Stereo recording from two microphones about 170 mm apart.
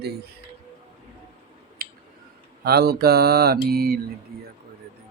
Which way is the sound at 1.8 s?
60° right (ahead or behind).